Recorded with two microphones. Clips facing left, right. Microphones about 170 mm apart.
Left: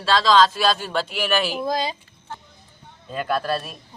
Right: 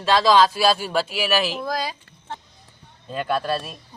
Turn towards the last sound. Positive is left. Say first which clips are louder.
# even
turn(degrees=0)  # may be behind; listen again after turning